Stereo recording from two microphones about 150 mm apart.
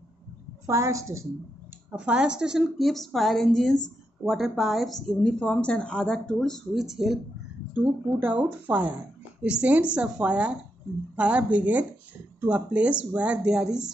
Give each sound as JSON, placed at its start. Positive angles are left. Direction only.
{"t": 0.7, "sound": "a woman's voice", "side_deg": -20}
{"t": 1.9, "sound": "speech", "side_deg": -10}